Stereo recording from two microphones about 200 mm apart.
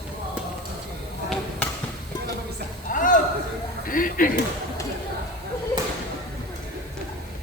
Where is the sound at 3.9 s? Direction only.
45° left (ahead or behind).